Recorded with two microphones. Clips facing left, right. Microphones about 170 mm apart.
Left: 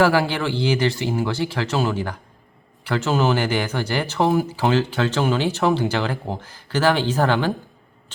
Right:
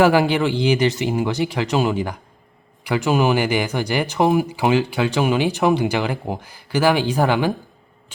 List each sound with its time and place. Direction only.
0.0 s speech: 15° right (ahead or behind)